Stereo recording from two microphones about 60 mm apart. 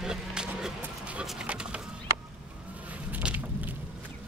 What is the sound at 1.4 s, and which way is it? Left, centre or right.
Bird, centre.